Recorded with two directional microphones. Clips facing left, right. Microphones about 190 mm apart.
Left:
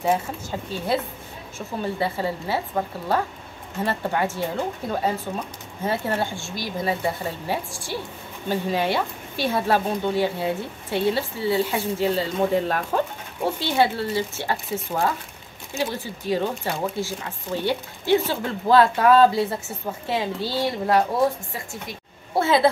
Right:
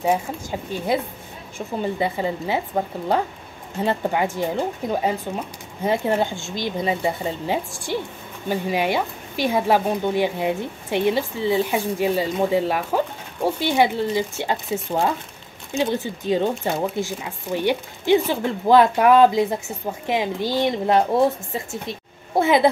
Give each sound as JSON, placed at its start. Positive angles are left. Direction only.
{"t": 0.0, "sound": "a woman's voice", "side_deg": -15}